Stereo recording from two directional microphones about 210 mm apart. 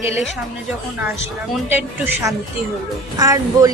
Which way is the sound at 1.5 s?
10° right (ahead or behind).